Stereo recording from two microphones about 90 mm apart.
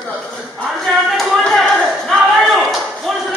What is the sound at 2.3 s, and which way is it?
Slam, centre (ahead or behind).